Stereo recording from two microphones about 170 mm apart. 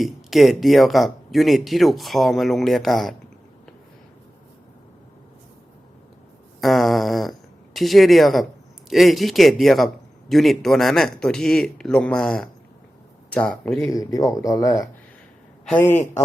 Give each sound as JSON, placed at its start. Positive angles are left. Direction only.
{"t": 0.0, "sound": "a man's voice", "side_deg": 0}
{"t": 6.6, "sound": "a man's voice", "side_deg": 0}
{"t": 13.9, "sound": "speech", "side_deg": 20}